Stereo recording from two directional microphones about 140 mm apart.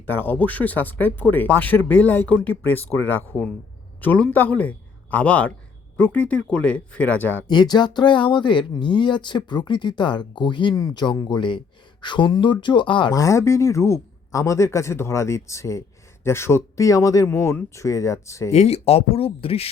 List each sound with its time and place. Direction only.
0.0 s speech: 15° left (ahead or behind)
7.4 s speech: 30° left (ahead or behind)
13.1 s speech: 20° left (ahead or behind)
18.5 s speech: 50° left (ahead or behind)